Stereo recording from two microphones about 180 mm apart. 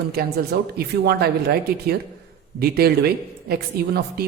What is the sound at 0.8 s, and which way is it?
A woman's voice, 60° right (ahead or behind).